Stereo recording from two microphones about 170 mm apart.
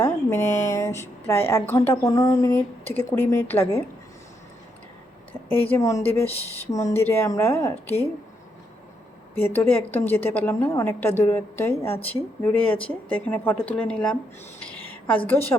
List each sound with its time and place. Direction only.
0.0 s a sound: 15° left (ahead or behind)
1.3 s a woman's voice: 15° left (ahead or behind)
5.5 s a woman's voice: 15° left (ahead or behind)
9.3 s a woman's voice: 10° left (ahead or behind)
14.6 s a sound: 10° left (ahead or behind)
15.3 s a woman's voice: 10° left (ahead or behind)